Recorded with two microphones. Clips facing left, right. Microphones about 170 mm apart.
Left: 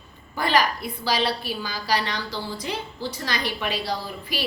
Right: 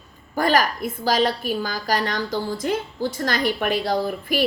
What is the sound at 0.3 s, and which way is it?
A woman's voice, 45° right (ahead or behind).